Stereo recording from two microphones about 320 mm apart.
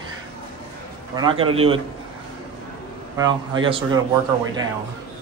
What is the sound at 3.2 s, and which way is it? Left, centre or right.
Speech, centre.